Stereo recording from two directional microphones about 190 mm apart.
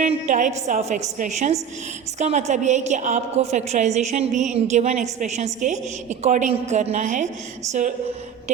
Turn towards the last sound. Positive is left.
turn(degrees=-40)  # may be behind; listen again after turning